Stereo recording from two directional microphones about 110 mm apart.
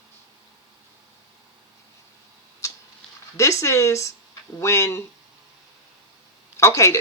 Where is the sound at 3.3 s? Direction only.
25° left (ahead or behind).